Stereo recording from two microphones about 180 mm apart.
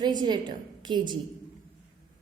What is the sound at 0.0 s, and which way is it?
A woman's voice, 25° right (ahead or behind).